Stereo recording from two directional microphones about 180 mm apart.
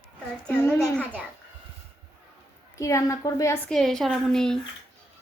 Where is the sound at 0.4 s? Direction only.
5° left (ahead or behind).